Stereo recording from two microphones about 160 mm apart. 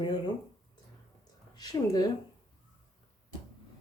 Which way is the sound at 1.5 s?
25° left (ahead or behind).